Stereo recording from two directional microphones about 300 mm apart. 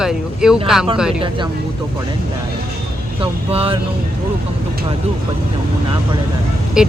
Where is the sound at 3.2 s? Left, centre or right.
Centre.